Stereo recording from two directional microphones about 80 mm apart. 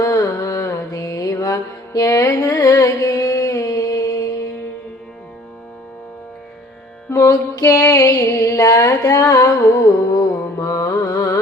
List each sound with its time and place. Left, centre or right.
0.0 s mantra: left
7.1 s music: left